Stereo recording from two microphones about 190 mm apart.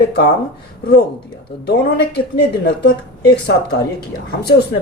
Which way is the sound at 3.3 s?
60° left (ahead or behind).